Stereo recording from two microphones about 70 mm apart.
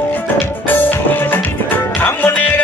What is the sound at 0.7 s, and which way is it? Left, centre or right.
Music, left.